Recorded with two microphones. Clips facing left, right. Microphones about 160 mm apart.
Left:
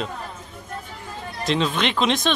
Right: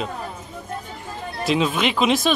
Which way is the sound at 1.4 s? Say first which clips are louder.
Right 2 dB; 5° right (ahead or behind).